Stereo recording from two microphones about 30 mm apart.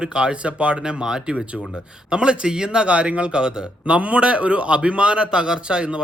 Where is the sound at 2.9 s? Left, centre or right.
Right.